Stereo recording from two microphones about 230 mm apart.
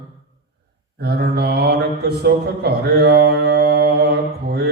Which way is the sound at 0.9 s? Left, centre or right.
Right.